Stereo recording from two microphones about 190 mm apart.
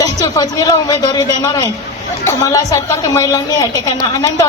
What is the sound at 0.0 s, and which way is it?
A woman's voice, 20° left (ahead or behind).